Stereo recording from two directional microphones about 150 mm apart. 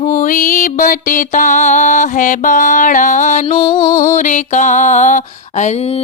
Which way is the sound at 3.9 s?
60° left (ahead or behind).